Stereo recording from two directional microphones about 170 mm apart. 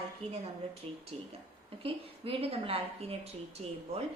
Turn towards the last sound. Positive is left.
turn(degrees=-35)  # may be behind; listen again after turning